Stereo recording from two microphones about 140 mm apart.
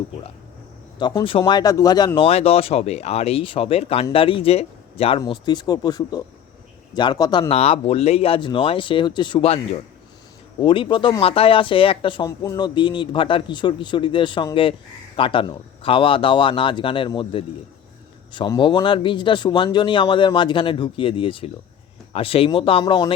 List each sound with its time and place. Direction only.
0.9 s speech: 30° left (ahead or behind)
2.1 s speech: 45° left (ahead or behind)
5.2 s speech: 30° left (ahead or behind)
10.6 s speech: 35° left (ahead or behind)